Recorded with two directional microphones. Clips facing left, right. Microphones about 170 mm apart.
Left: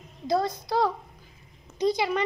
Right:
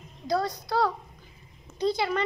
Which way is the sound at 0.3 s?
20° left (ahead or behind).